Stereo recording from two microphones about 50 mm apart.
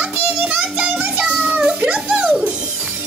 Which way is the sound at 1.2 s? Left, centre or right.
Right.